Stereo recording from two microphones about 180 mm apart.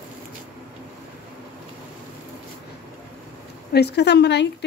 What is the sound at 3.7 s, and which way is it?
Speech, 70° left (ahead or behind).